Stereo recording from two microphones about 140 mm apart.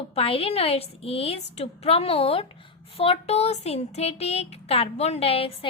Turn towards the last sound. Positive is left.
turn(degrees=40)  # may be behind; listen again after turning